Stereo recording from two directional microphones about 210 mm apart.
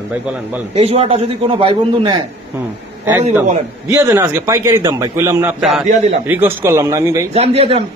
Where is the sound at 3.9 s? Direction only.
10° right (ahead or behind).